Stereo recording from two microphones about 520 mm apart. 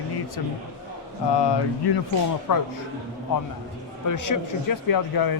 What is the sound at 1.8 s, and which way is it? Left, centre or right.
Speech, left.